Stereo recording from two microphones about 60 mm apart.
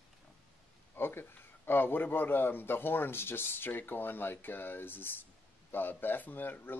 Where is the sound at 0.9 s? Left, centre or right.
Left.